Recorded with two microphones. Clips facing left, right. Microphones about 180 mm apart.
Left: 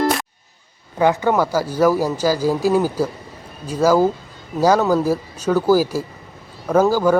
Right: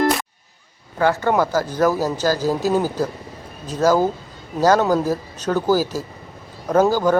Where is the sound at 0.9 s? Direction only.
15° left (ahead or behind).